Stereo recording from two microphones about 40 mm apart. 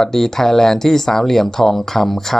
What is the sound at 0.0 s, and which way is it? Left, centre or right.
Speech, centre.